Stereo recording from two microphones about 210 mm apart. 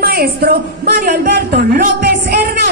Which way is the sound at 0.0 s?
45° right (ahead or behind).